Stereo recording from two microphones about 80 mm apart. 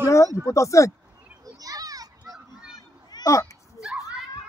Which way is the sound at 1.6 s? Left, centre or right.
Right.